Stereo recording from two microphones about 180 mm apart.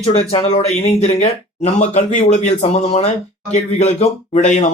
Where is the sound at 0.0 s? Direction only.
35° left (ahead or behind).